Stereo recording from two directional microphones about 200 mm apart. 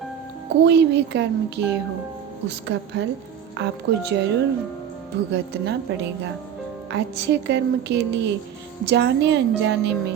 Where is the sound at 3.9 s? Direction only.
60° right (ahead or behind).